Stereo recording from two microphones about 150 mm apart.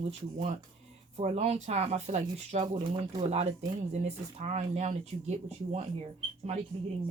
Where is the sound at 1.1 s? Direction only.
45° right (ahead or behind).